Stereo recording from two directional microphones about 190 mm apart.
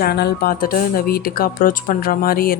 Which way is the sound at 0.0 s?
60° left (ahead or behind).